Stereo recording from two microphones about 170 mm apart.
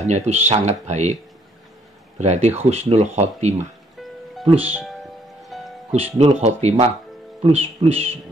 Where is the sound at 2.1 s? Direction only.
40° right (ahead or behind).